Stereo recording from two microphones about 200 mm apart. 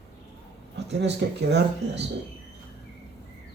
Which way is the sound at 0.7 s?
60° right (ahead or behind).